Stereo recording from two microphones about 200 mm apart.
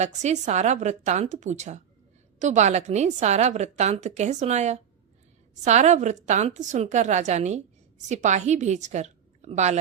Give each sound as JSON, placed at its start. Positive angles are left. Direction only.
{"t": 0.0, "sound": "a woman's voice", "side_deg": -35}